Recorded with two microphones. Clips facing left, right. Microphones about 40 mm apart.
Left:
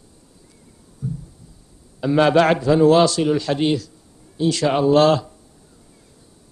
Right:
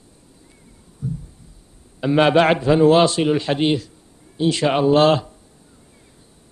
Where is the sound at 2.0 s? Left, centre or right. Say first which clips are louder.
Even; right.